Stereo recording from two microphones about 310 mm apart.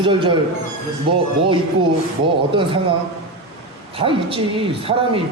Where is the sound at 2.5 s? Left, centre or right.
Centre.